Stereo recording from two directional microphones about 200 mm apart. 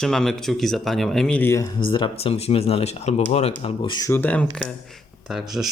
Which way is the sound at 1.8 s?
25° left (ahead or behind).